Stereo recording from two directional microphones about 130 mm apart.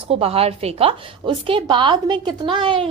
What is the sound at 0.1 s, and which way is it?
A woman's voice, 50° right (ahead or behind).